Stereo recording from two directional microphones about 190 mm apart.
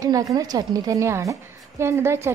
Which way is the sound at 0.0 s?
20° right (ahead or behind).